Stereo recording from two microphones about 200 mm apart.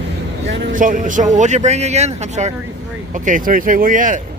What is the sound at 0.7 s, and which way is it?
Speech, 40° right (ahead or behind).